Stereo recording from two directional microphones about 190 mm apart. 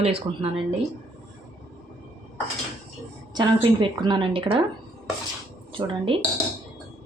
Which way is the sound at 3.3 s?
20° right (ahead or behind).